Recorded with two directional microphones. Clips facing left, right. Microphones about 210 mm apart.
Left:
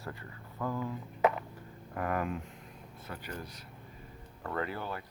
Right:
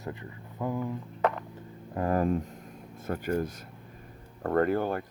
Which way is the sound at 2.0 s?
30° right (ahead or behind).